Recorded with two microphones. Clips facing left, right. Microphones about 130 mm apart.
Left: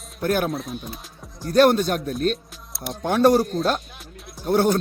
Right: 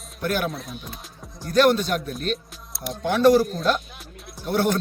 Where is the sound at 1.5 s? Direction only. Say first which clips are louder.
Left 2 dB; 45° left (ahead or behind).